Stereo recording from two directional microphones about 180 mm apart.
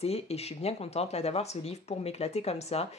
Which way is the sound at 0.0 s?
35° left (ahead or behind).